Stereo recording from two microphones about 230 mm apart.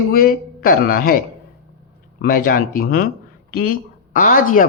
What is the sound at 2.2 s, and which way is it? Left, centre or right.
A man's voice, left.